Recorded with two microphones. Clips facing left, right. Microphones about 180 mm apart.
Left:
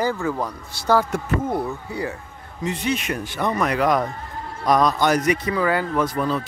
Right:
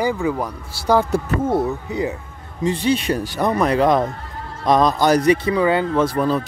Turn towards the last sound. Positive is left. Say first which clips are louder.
# right 4 dB
turn(degrees=-40)  # may be behind; listen again after turning